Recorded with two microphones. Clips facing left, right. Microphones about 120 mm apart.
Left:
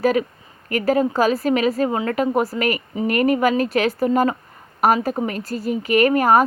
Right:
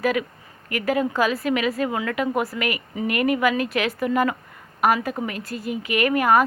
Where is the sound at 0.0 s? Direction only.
35° left (ahead or behind).